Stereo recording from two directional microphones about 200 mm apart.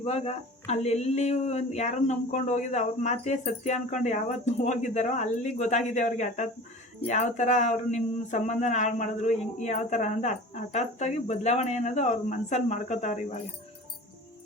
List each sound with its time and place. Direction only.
0.0 s speech: 30° left (ahead or behind)